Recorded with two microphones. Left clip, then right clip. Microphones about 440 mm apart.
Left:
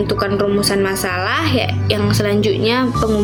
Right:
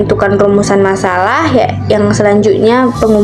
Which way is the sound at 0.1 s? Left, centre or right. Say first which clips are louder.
Right 10 dB; left.